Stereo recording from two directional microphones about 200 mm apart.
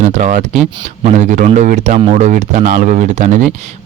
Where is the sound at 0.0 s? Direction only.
40° right (ahead or behind).